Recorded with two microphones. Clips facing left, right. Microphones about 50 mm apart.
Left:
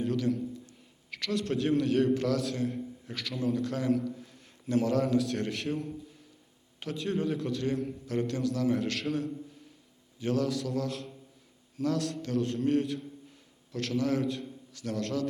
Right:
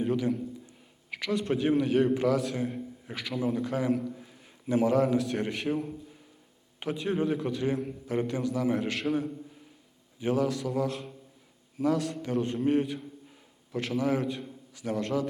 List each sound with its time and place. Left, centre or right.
0.0 s a man's voice: centre